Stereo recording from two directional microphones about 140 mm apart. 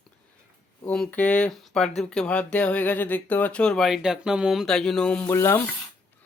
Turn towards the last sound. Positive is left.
turn(degrees=20)  # may be behind; listen again after turning